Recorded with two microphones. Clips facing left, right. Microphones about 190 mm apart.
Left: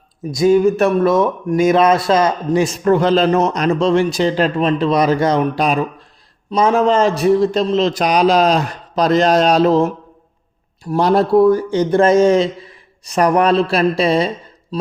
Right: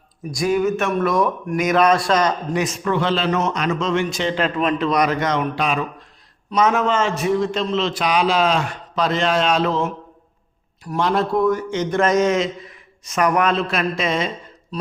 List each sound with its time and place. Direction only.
0.3 s speech: 25° left (ahead or behind)